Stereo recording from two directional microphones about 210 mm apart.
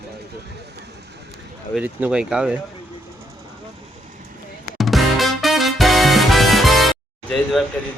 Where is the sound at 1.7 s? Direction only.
5° right (ahead or behind).